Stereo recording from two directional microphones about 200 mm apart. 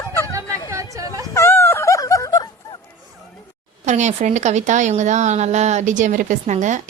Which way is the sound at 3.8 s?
35° right (ahead or behind).